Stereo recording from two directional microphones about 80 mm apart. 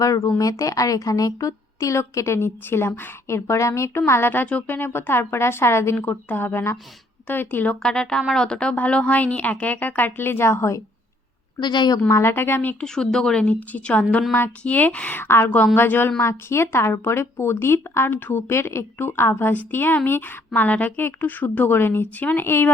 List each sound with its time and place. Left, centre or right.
0.0 s a woman's voice: left
6.0 s a woman's voice: left
11.6 s a woman's voice: left
12.0 s a woman's voice: left
12.8 s a woman's voice: centre; by 15.4 s left
15.4 s a woman's voice: centre
18.4 s a woman's voice: left